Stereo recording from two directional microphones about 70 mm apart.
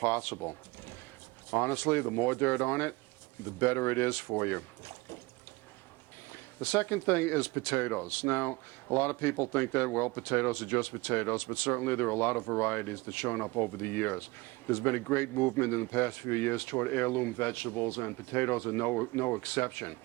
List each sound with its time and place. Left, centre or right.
0.0 s speech: left
6.3 s speech: left